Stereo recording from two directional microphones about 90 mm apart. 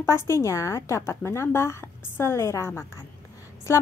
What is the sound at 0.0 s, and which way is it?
A woman's voice, 30° left (ahead or behind).